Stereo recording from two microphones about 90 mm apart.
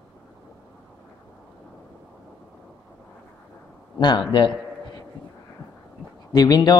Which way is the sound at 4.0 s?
60° left (ahead or behind).